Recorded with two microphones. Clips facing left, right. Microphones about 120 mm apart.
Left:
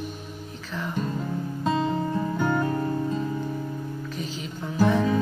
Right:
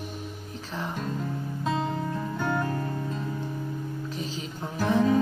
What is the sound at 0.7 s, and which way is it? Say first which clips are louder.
Music: left 1 dB; 30° right (ahead or behind).